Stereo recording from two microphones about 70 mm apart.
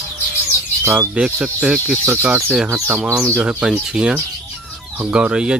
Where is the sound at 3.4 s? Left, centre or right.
Centre.